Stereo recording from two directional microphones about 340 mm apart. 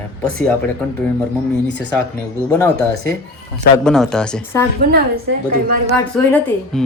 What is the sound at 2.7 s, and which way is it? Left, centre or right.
Speech, right.